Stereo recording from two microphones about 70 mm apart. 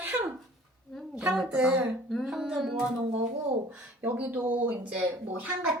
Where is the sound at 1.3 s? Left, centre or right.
Centre.